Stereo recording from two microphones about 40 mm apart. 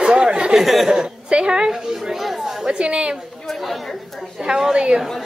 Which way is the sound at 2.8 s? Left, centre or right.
Right.